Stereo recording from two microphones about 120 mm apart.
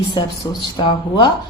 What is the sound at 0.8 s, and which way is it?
Speech, 40° left (ahead or behind).